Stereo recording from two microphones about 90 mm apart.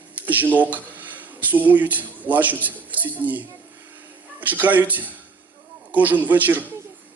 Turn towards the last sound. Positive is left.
turn(degrees=-20)  # may be behind; listen again after turning